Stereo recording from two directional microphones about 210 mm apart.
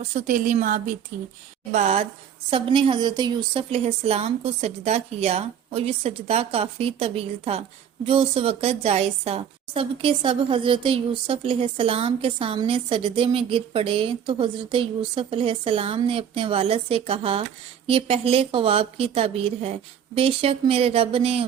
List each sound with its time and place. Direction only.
0.1 s a woman's voice: 35° right (ahead or behind)